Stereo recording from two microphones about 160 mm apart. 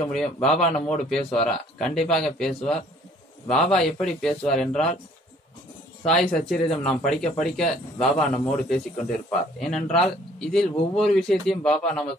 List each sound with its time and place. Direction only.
0.0 s speech: 5° left (ahead or behind)
6.0 s speech: 5° left (ahead or behind)